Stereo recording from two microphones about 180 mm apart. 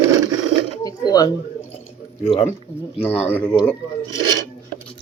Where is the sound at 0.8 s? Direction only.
20° left (ahead or behind).